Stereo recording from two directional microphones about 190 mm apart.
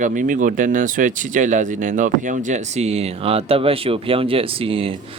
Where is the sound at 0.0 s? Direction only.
45° right (ahead or behind).